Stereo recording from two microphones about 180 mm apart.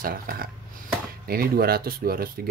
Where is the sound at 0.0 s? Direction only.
55° right (ahead or behind).